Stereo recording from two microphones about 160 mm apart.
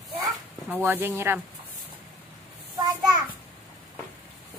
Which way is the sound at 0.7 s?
10° right (ahead or behind).